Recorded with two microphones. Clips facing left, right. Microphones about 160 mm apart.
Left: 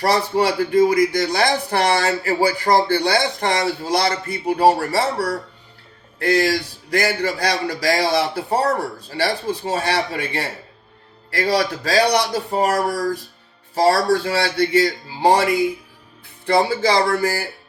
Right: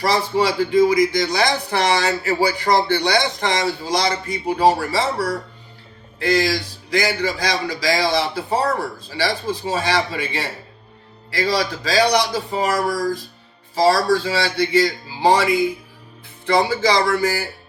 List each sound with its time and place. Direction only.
0.0 s a man's voice: 55° left (ahead or behind)
16.6 s speech: 40° left (ahead or behind)